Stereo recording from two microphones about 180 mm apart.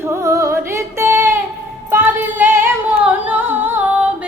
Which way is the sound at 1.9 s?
10° right (ahead or behind).